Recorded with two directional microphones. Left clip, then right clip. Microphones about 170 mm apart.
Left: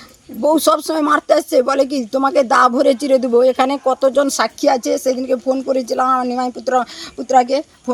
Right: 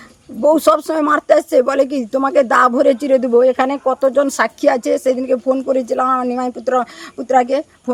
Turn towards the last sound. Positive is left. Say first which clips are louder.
# even
turn(degrees=-5)  # may be behind; listen again after turning